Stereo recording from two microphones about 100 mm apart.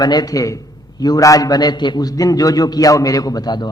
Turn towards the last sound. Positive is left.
turn(degrees=45)  # may be behind; listen again after turning